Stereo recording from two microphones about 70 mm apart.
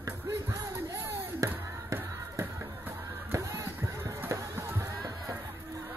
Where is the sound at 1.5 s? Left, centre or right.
Right.